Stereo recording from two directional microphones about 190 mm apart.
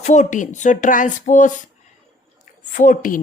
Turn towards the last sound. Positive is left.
turn(degrees=45)  # may be behind; listen again after turning